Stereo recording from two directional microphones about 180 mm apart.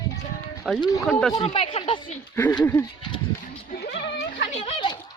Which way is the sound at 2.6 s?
15° left (ahead or behind).